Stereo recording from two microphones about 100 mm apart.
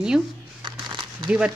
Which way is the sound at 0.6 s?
50° right (ahead or behind).